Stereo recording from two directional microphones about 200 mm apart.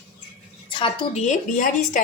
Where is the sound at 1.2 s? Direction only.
40° left (ahead or behind).